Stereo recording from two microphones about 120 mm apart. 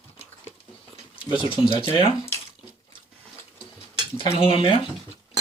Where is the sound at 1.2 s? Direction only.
45° left (ahead or behind).